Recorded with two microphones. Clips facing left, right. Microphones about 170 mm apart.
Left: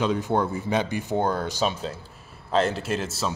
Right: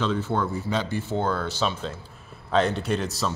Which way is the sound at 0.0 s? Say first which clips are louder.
Left 2 dB; 15° left (ahead or behind).